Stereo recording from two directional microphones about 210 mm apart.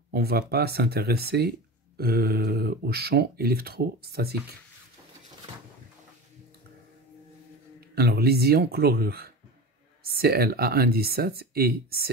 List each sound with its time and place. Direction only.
0.1 s speech: 50° right (ahead or behind)
7.9 s speech: 50° right (ahead or behind)